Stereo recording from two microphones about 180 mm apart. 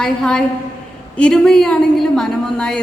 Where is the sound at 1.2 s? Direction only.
5° left (ahead or behind).